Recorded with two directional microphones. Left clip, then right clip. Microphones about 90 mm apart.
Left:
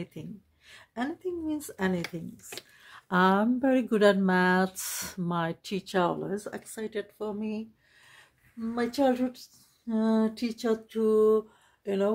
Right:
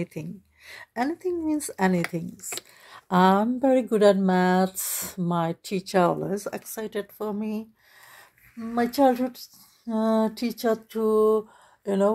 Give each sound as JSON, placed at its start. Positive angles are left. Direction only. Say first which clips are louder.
{"t": 0.0, "sound": "speech", "louder": "right 7 dB", "side_deg": -25}
{"t": 0.7, "sound": "a woman's voice", "louder": "right 7 dB", "side_deg": -45}
{"t": 1.2, "sound": "speech", "louder": "right 6 dB", "side_deg": -30}
{"t": 2.8, "sound": "a sound", "louder": "right 4 dB", "side_deg": -15}
{"t": 3.9, "sound": "speech", "louder": "right 1 dB", "side_deg": 10}
{"t": 5.9, "sound": "speech", "louder": "right 6 dB", "side_deg": -15}
{"t": 7.2, "sound": "speech", "louder": "right 4 dB", "side_deg": -40}
{"t": 8.7, "sound": "speech", "louder": "right 5 dB", "side_deg": -40}
{"t": 11.0, "sound": "a sound", "louder": "right 1 dB", "side_deg": -25}